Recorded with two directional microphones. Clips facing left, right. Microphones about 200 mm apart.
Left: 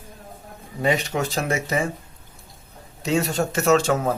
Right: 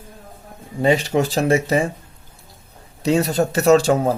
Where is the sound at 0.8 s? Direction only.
30° right (ahead or behind).